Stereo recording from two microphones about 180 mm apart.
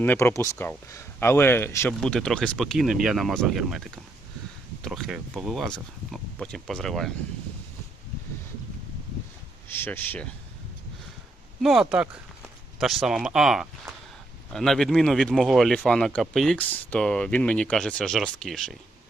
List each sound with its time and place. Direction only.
0.0 s speech: 10° left (ahead or behind)
2.0 s speech: 5° left (ahead or behind)
9.6 s speech: 10° left (ahead or behind)
11.6 s speech: centre (ahead or behind)